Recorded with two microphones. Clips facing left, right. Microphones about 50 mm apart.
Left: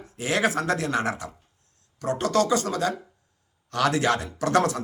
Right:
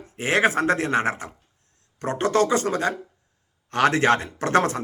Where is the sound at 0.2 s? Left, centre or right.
Right.